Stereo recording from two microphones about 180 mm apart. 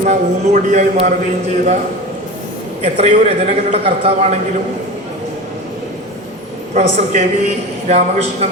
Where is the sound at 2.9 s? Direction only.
35° right (ahead or behind).